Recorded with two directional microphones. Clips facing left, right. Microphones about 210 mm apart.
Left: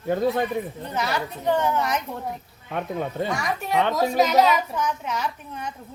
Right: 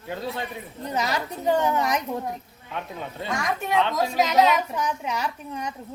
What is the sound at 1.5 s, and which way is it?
Speech, 15° right (ahead or behind).